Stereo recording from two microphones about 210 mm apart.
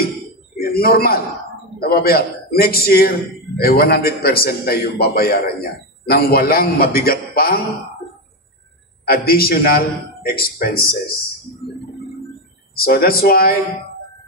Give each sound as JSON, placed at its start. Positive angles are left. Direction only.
{"t": 0.6, "sound": "a man's voice", "side_deg": 45}
{"t": 9.0, "sound": "a man's voice", "side_deg": 45}
{"t": 12.7, "sound": "a man's voice", "side_deg": 45}